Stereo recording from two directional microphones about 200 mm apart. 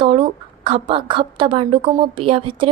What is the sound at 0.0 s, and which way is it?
A woman's voice, 25° right (ahead or behind).